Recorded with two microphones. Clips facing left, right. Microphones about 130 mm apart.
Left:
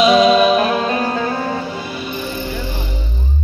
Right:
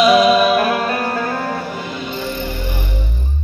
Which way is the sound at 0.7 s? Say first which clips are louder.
Left 1 dB; 20° left (ahead or behind).